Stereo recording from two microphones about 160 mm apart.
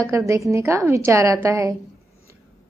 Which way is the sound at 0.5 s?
15° right (ahead or behind).